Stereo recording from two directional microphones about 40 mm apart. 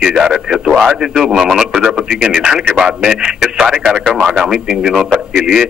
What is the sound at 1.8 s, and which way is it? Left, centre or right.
Speech, centre.